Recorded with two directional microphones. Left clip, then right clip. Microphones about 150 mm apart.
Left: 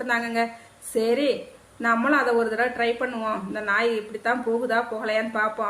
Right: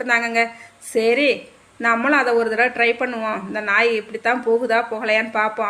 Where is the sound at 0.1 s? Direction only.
25° right (ahead or behind).